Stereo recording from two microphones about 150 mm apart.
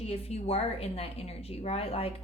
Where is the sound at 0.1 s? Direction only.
45° left (ahead or behind).